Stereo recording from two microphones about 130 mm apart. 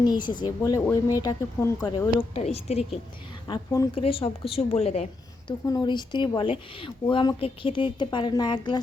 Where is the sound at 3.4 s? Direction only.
30° left (ahead or behind).